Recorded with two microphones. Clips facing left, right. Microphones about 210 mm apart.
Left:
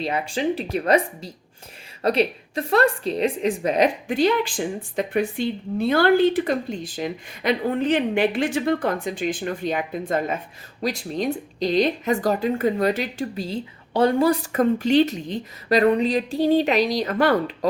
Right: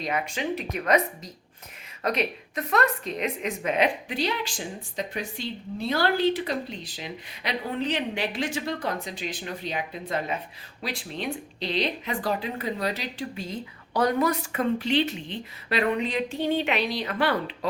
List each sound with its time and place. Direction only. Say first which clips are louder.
0.0 s a woman's voice: left 5 dB; 30° left (ahead or behind); by 13.2 s 50° left (ahead or behind)
13.3 s a woman's voice: left 6 dB; 30° left (ahead or behind)